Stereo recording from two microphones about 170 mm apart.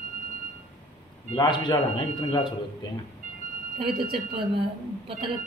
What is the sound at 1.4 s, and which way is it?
Speech, 25° left (ahead or behind).